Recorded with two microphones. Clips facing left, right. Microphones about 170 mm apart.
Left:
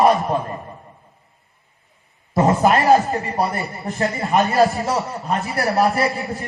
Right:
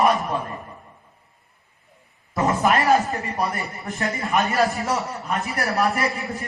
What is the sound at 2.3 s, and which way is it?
A man's voice, 35° left (ahead or behind).